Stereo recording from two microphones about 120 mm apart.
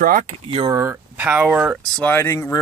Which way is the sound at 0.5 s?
40° right (ahead or behind).